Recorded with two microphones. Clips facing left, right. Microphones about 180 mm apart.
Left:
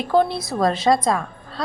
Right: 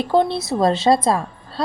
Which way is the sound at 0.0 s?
25° right (ahead or behind).